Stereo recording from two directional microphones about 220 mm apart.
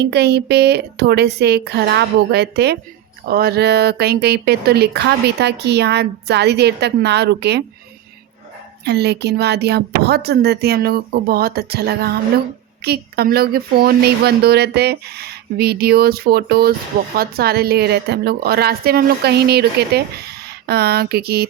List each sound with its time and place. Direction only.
0.0 s speech: 50° right (ahead or behind)
8.8 s speech: 50° right (ahead or behind)